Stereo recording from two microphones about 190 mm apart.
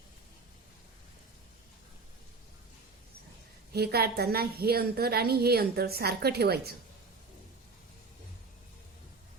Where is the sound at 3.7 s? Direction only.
55° right (ahead or behind).